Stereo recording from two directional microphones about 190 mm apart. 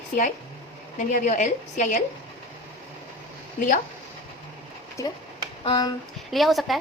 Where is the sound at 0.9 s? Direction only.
40° left (ahead or behind).